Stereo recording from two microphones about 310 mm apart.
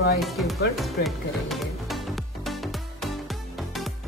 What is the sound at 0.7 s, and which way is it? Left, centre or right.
Music, centre.